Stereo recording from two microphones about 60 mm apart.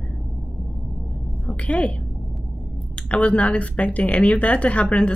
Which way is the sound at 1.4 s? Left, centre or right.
Left.